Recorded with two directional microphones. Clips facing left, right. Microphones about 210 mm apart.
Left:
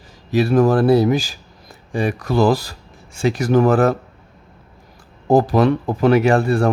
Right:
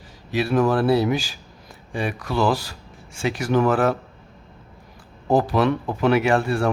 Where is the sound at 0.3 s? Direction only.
40° left (ahead or behind).